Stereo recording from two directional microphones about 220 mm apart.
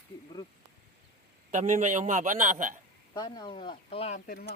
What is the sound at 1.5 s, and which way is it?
A man's voice, 35° right (ahead or behind).